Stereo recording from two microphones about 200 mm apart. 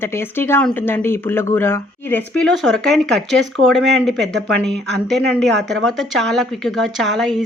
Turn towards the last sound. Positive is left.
turn(degrees=0)  # may be behind; listen again after turning